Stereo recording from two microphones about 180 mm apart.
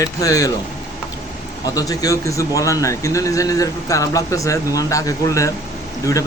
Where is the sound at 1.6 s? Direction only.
20° left (ahead or behind).